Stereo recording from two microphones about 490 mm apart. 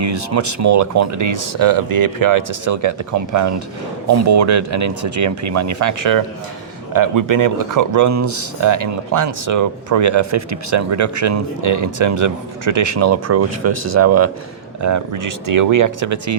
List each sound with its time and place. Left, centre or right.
0.0 s speech: right